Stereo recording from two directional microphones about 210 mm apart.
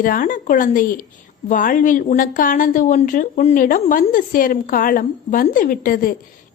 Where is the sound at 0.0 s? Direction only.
40° left (ahead or behind).